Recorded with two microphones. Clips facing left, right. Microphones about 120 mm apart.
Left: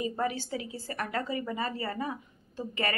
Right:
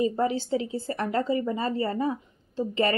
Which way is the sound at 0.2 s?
25° right (ahead or behind).